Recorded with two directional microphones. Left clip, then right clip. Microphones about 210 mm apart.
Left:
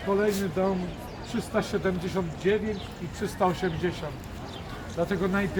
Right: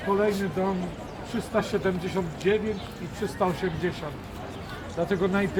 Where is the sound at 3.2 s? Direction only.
25° left (ahead or behind).